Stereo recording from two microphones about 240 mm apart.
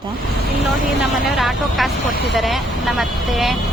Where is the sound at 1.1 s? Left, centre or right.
Centre.